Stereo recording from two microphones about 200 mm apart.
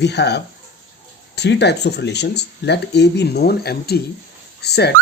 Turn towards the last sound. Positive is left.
turn(degrees=55)  # may be behind; listen again after turning